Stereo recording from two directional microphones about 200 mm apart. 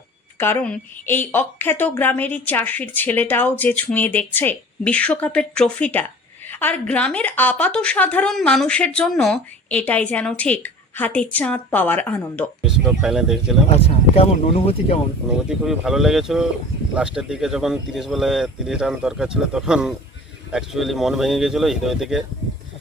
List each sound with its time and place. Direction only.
0.3 s a woman's voice: 10° left (ahead or behind)
12.6 s speech: 5° right (ahead or behind)
13.7 s speech: 30° left (ahead or behind)
15.3 s speech: 5° right (ahead or behind)